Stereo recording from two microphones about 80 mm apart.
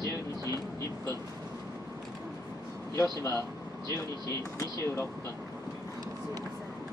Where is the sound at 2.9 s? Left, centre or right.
Left.